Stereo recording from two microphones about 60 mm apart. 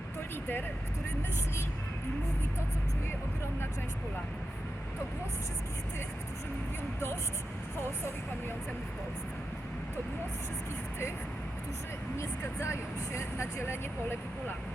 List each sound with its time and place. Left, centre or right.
12.1 s speech: left